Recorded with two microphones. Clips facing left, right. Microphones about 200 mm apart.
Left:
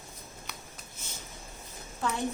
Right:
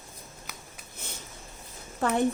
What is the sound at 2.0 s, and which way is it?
Speech, 60° right (ahead or behind).